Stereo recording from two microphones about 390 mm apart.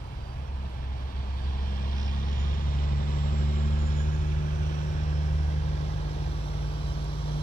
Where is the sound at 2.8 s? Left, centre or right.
Left.